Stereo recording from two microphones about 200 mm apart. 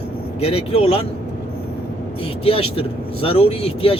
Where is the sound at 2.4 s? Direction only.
30° left (ahead or behind).